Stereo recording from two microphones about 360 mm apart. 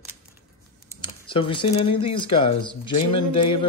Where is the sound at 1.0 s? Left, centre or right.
Centre.